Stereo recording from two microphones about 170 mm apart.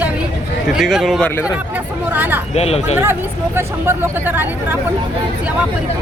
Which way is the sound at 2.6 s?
35° left (ahead or behind).